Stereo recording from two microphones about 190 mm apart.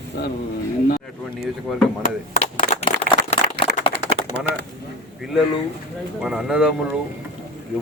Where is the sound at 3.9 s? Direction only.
70° right (ahead or behind).